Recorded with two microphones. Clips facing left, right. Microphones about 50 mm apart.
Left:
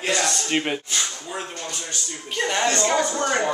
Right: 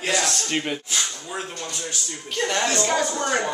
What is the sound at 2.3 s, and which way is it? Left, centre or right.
Speech, centre.